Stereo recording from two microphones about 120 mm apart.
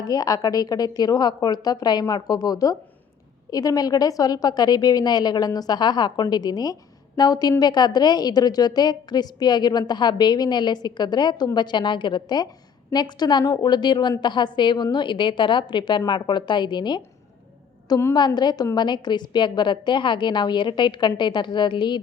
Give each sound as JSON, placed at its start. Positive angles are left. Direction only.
{"t": 0.0, "sound": "a woman's voice", "side_deg": 30}
{"t": 18.1, "sound": "a woman's voice", "side_deg": 35}